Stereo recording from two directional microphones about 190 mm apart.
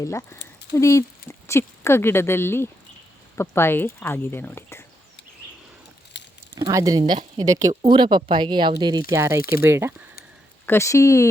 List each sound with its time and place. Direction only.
0.0 s speech: 15° left (ahead or behind)
6.1 s a sound: 65° left (ahead or behind)
6.6 s speech: 20° right (ahead or behind)
10.7 s speech: 15° left (ahead or behind)